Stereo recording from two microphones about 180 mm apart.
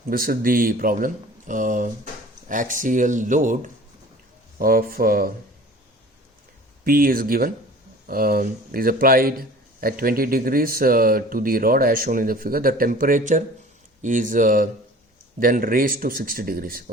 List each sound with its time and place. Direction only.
0.1 s a man's voice: 55° right (ahead or behind)
6.8 s a man's voice: 55° right (ahead or behind)